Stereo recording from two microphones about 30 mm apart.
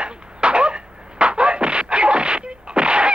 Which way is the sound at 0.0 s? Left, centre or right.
Right.